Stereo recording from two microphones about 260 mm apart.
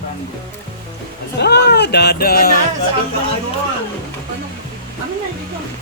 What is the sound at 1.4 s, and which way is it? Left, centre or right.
Speech, left.